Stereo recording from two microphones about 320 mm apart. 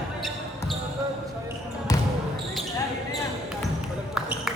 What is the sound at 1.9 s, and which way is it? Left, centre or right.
Basketball bounce, centre.